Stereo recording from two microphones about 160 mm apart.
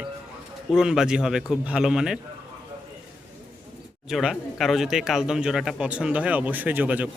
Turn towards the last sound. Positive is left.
turn(degrees=-10)  # may be behind; listen again after turning